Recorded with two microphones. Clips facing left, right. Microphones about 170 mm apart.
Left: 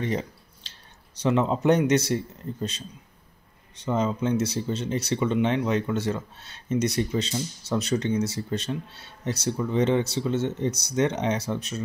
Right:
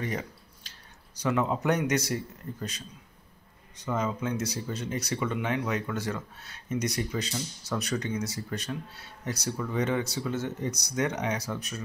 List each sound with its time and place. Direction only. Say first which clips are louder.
0.0 s a sound: left 5 dB; 25° left (ahead or behind)
1.2 s speech: left 5 dB; 25° left (ahead or behind)
3.7 s speech: left 5 dB; 25° left (ahead or behind)